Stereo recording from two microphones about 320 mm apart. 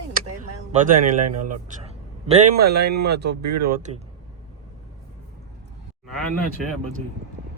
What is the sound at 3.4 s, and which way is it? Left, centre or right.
Speech, right.